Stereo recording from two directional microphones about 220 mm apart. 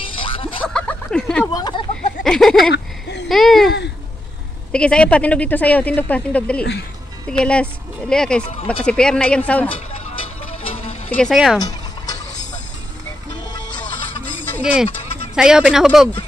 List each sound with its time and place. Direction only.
0.0 s music: 25° left (ahead or behind)
0.7 s a sound: 5° left (ahead or behind)
2.2 s a sound: centre (ahead or behind)
3.3 s speech: centre (ahead or behind)
4.7 s speech: 5° left (ahead or behind)
11.1 s speech: 5° left (ahead or behind)
14.6 s speech: 5° right (ahead or behind)